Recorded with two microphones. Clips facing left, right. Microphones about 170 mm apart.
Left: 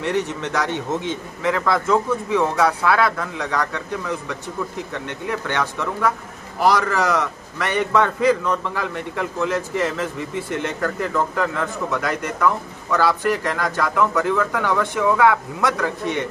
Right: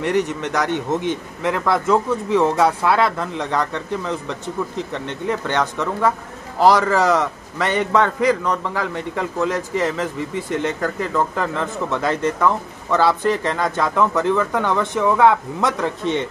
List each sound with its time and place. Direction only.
0.0 s a man's voice: 15° right (ahead or behind)